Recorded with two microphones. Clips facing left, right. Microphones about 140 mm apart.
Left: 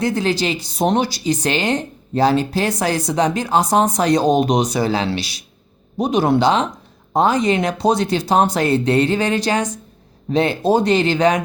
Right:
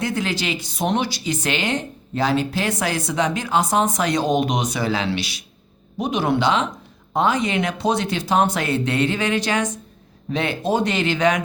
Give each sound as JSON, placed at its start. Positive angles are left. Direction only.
{"t": 0.0, "sound": "speech", "side_deg": 35}